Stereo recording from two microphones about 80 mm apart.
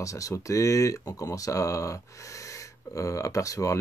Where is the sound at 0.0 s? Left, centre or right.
Left.